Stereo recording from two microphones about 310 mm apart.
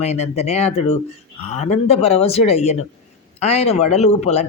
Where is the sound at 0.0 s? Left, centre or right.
Left.